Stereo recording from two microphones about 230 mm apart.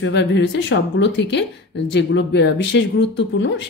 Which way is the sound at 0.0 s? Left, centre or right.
Left.